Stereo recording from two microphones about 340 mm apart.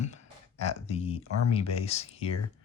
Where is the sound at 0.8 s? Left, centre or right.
Centre.